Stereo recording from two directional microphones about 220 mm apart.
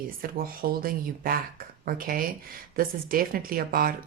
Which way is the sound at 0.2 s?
40° right (ahead or behind).